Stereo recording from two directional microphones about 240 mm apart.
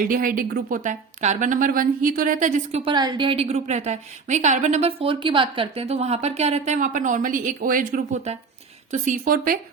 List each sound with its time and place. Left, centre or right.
0.1 s a woman's voice: right